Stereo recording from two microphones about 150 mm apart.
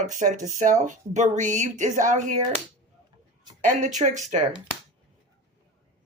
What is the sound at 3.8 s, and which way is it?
Speech, 55° right (ahead or behind).